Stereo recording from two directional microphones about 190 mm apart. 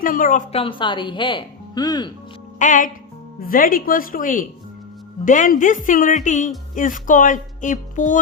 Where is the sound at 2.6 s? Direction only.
40° left (ahead or behind).